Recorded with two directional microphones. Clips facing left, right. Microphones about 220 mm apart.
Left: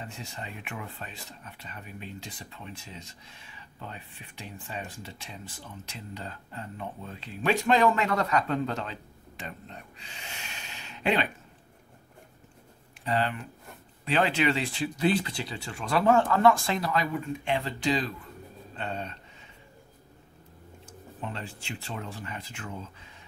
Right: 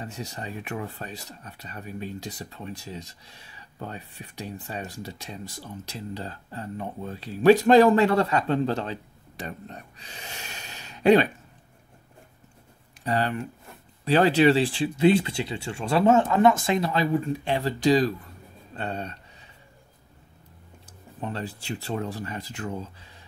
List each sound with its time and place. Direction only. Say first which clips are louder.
0.0 s speech: right 5 dB; 40° right (ahead or behind)
13.0 s speech: right 3 dB; 40° right (ahead or behind)
21.2 s speech: right 5 dB; 40° right (ahead or behind)